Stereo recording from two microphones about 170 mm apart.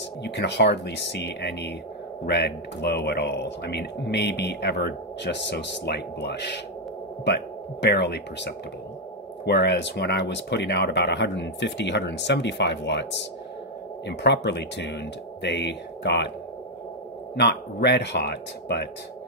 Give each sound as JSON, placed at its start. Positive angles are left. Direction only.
{"t": 0.2, "sound": "speech", "side_deg": 80}
{"t": 7.8, "sound": "speech", "side_deg": 80}
{"t": 17.4, "sound": "speech", "side_deg": 75}